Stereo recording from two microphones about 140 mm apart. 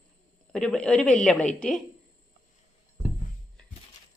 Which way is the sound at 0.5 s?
5° left (ahead or behind).